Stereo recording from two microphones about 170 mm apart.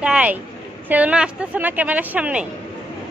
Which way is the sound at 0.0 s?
5° right (ahead or behind).